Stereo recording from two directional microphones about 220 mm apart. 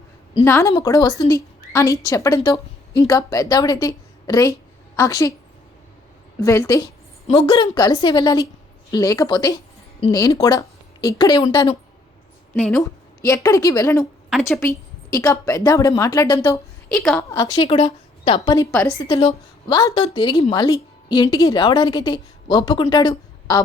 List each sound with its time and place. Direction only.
0.4 s a woman's voice: 10° left (ahead or behind)
6.4 s a woman's voice: 15° left (ahead or behind)
7.3 s a woman's voice: 25° left (ahead or behind)
12.5 s a woman's voice: 10° left (ahead or behind)
14.3 s a woman's voice: centre (ahead or behind)
14.6 s a woman's voice: 10° left (ahead or behind)
16.9 s a woman's voice: 5° left (ahead or behind)
17.2 s a woman's voice: 15° left (ahead or behind)